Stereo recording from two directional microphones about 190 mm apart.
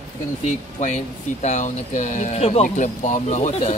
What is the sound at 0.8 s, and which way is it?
Speech, 35° left (ahead or behind).